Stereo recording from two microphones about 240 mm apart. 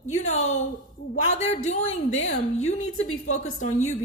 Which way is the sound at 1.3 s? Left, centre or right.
Left.